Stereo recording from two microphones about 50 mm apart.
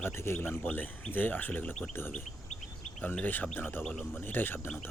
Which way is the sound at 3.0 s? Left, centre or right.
Left.